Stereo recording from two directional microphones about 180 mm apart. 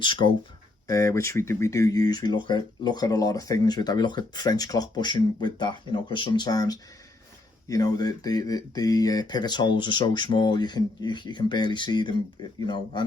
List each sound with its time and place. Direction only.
0.0 s speech: 25° left (ahead or behind)